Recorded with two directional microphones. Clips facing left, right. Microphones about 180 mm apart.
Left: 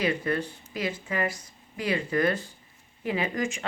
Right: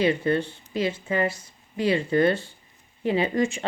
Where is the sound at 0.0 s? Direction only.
25° right (ahead or behind).